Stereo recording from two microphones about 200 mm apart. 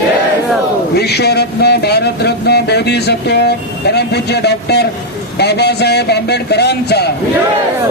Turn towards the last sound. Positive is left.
turn(degrees=55)  # may be behind; listen again after turning